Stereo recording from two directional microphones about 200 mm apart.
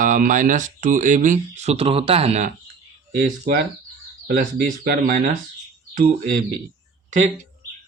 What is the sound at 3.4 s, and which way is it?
Speech, 45° right (ahead or behind).